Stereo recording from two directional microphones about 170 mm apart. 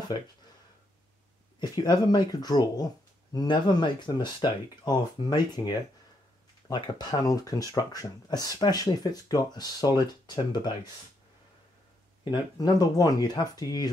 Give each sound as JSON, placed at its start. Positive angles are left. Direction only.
{"t": 1.6, "sound": "speech", "side_deg": 25}
{"t": 12.3, "sound": "speech", "side_deg": 20}